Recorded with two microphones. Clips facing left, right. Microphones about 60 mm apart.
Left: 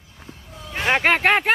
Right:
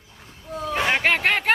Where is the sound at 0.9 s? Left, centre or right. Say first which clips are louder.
Left 5 dB; left.